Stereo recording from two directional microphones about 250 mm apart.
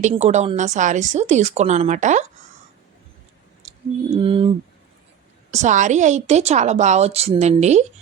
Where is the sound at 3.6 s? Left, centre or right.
Right.